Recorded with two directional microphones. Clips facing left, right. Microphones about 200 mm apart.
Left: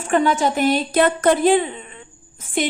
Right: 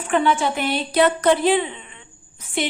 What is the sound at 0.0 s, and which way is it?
A woman's voice, 45° left (ahead or behind).